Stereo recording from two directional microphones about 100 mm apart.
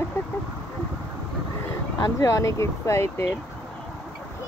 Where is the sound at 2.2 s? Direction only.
30° left (ahead or behind).